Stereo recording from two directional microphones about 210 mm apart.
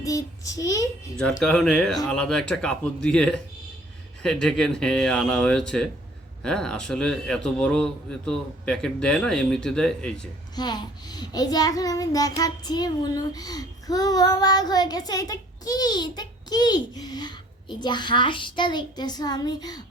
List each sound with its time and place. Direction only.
0.0 s a child's voice: 15° left (ahead or behind)
1.4 s a man's voice: centre (ahead or behind)
10.5 s child singing: 20° left (ahead or behind)